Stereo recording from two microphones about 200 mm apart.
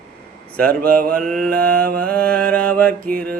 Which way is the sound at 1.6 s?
50° right (ahead or behind).